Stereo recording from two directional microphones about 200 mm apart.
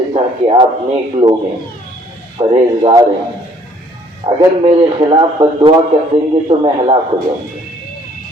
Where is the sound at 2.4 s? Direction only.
25° right (ahead or behind).